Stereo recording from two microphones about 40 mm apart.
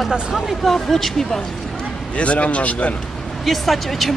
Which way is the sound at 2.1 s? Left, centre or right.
Left.